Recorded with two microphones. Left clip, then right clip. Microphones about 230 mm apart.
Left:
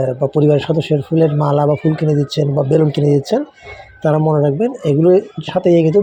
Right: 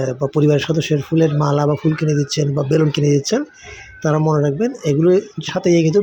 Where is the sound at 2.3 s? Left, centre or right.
Right.